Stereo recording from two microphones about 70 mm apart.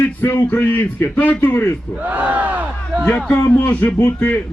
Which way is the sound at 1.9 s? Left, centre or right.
Right.